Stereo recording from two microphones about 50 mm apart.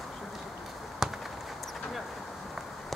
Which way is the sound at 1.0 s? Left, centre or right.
Centre.